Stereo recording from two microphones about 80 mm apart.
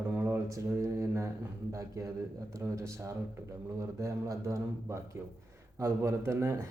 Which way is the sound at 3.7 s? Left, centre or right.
Right.